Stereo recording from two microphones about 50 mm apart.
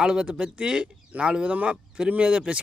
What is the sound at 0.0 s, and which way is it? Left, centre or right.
Speech, centre.